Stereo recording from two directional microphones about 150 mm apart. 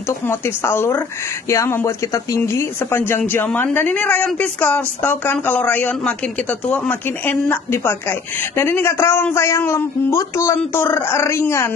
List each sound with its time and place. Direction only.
0.3 s speech: 15° left (ahead or behind)